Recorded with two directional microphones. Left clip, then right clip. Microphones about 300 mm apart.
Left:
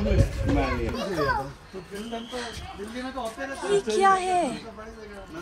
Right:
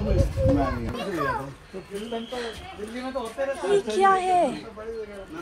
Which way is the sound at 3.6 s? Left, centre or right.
Centre.